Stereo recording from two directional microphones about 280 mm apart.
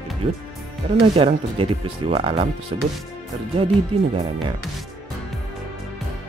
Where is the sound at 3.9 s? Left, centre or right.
Centre.